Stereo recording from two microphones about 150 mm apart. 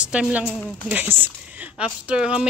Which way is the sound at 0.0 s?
10° right (ahead or behind).